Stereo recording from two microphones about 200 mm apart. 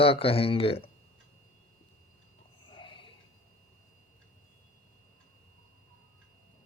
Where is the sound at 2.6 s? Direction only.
25° left (ahead or behind).